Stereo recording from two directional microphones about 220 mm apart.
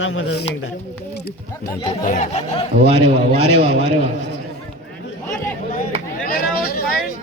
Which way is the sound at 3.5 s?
70° left (ahead or behind).